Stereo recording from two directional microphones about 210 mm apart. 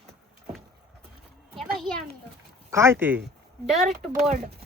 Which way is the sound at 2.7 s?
15° right (ahead or behind).